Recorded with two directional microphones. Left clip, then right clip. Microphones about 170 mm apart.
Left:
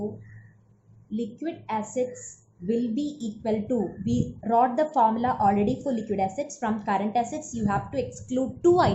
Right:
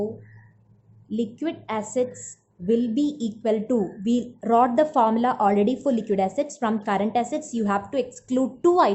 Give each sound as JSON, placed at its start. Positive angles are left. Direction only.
{"t": 1.1, "sound": "speech", "side_deg": -50}